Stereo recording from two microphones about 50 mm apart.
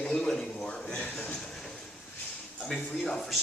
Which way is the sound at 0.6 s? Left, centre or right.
Centre.